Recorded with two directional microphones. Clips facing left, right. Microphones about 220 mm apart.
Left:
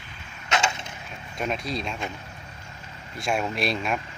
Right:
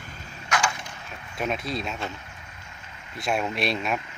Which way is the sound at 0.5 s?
25° left (ahead or behind).